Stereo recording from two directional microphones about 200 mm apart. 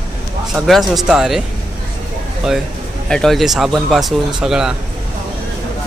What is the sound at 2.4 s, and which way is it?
Speech, 5° right (ahead or behind).